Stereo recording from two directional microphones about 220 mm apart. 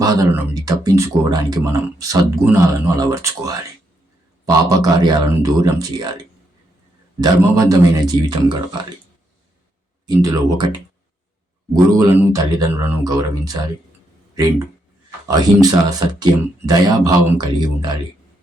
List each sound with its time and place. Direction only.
0.0 s speech: 15° right (ahead or behind)
7.2 s speech: 15° right (ahead or behind)
10.1 s speech: 15° right (ahead or behind)
11.7 s speech: 15° right (ahead or behind)
15.3 s speech: 15° right (ahead or behind)